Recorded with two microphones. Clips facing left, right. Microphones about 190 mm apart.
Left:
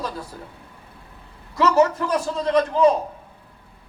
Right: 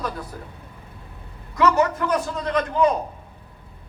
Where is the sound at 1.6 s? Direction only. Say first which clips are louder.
Left 2 dB; 25° left (ahead or behind).